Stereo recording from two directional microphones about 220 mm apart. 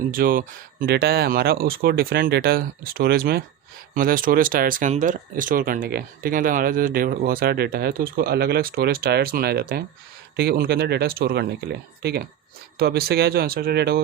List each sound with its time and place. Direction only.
0.1 s speech: 40° right (ahead or behind)